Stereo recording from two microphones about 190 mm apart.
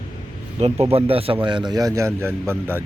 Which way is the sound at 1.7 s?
20° right (ahead or behind).